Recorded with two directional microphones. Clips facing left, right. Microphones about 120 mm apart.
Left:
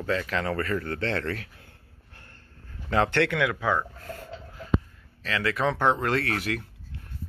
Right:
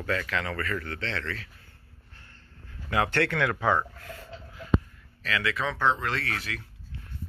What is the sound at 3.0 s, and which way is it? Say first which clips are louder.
Speech: left 2 dB; 20° left (ahead or behind).